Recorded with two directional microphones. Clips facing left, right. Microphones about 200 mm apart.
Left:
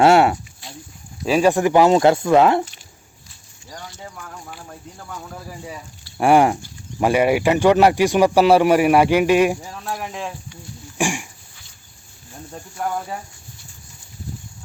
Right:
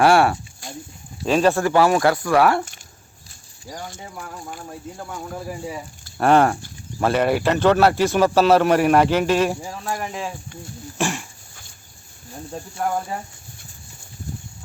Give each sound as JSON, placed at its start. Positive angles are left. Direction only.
{"t": 0.0, "sound": "speech", "side_deg": 20}
{"t": 0.6, "sound": "a sound", "side_deg": -45}
{"t": 1.2, "sound": "speech", "side_deg": 10}
{"t": 6.1, "sound": "a man's voice", "side_deg": 10}
{"t": 9.8, "sound": "speech", "side_deg": 0}
{"t": 10.9, "sound": "a man's voice", "side_deg": 15}